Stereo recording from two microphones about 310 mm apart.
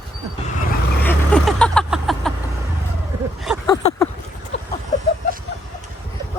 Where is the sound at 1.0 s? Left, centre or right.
Centre.